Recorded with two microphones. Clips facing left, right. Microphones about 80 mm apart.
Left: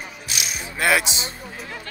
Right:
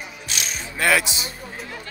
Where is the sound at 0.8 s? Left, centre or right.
Left.